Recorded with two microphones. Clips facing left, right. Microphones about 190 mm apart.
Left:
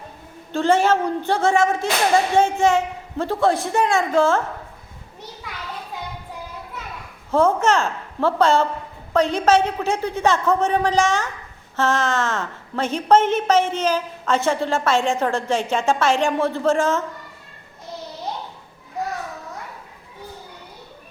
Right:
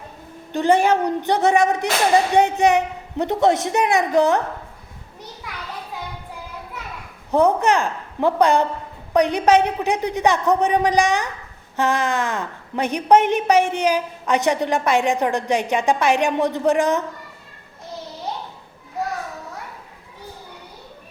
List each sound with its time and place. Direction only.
0.5 s a woman's voice: 15° right (ahead or behind)
7.3 s a woman's voice: 15° right (ahead or behind)